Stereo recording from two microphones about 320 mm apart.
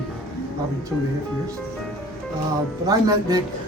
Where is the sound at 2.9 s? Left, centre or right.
Centre.